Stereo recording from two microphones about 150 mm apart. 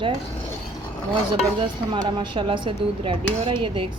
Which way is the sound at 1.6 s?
30° right (ahead or behind).